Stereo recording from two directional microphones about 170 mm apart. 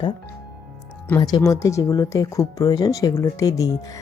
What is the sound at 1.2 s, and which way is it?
Speech, 25° left (ahead or behind).